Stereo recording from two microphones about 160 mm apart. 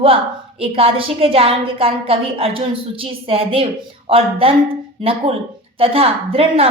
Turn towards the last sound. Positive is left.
turn(degrees=-35)  # may be behind; listen again after turning